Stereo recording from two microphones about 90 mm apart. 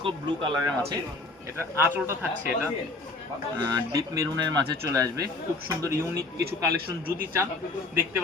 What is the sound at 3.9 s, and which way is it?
Speech, 40° right (ahead or behind).